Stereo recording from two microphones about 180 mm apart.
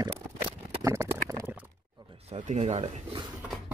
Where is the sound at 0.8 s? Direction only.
15° right (ahead or behind).